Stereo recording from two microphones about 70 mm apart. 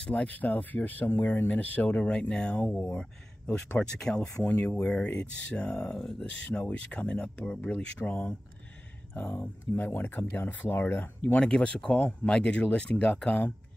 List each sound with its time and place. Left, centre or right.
0.0 s speech: centre; by 1.5 s left
1.5 s speech: left
11.3 s speech: centre